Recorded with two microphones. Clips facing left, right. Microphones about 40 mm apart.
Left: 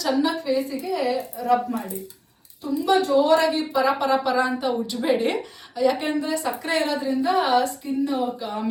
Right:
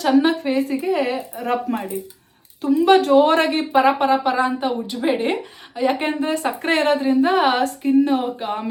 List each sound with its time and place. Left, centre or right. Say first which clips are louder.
0.0 s speech: right 6 dB; right
3.9 s speech: right 3 dB; right
5.7 s speech: right 1 dB; right